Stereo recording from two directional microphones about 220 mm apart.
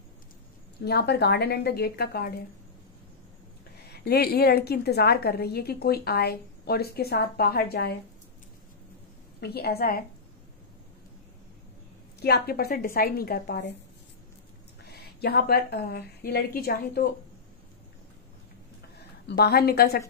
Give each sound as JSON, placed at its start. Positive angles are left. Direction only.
{"t": 0.7, "sound": "a woman's voice", "side_deg": 45}
{"t": 3.9, "sound": "a woman's voice", "side_deg": 45}
{"t": 9.4, "sound": "a woman's voice", "side_deg": 45}
{"t": 12.2, "sound": "a woman's voice", "side_deg": 45}
{"t": 14.9, "sound": "a woman's voice", "side_deg": 45}
{"t": 19.2, "sound": "a woman's voice", "side_deg": 45}